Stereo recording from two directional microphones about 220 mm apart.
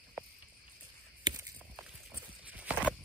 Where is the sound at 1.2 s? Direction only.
15° right (ahead or behind).